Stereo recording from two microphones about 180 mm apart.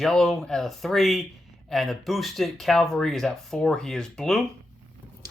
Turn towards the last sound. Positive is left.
turn(degrees=5)  # may be behind; listen again after turning